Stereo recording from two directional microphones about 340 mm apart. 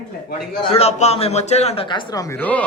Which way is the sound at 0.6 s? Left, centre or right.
Centre.